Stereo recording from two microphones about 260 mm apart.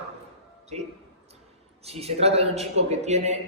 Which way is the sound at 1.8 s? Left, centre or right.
Right.